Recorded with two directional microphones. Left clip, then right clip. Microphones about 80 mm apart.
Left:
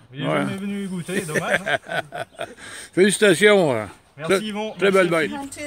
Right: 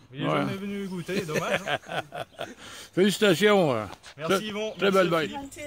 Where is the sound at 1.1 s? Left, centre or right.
Centre.